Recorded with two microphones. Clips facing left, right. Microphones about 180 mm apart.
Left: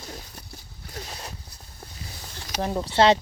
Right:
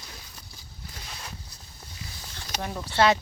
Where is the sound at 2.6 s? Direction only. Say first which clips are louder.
Left 4 dB; 25° left (ahead or behind).